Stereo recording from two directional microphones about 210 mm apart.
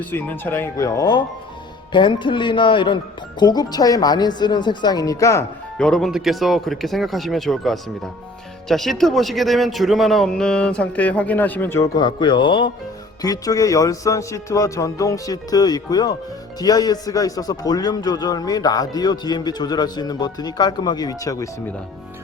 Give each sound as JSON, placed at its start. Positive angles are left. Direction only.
{"t": 0.0, "sound": "speech", "side_deg": 10}
{"t": 5.7, "sound": "speech", "side_deg": 5}